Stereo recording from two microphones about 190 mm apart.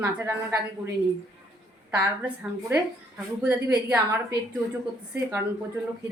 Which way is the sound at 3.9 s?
15° right (ahead or behind).